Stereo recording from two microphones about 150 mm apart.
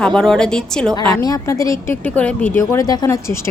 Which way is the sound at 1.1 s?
25° left (ahead or behind).